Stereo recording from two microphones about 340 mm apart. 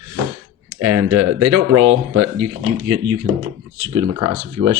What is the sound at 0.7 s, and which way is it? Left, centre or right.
Speech, right.